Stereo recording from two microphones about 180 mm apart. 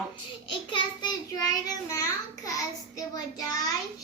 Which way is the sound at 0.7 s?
20° left (ahead or behind).